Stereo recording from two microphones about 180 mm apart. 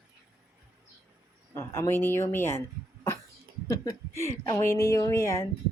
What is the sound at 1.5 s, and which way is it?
A woman's voice, 15° left (ahead or behind).